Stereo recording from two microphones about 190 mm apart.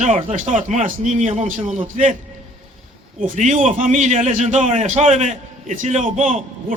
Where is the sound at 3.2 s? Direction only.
45° right (ahead or behind).